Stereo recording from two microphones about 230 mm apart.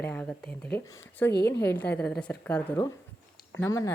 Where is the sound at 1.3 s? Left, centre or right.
Left.